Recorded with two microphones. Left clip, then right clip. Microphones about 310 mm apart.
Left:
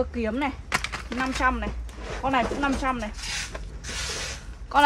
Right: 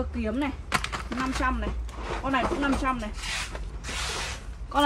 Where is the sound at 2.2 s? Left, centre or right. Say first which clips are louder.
Left 3 dB; left.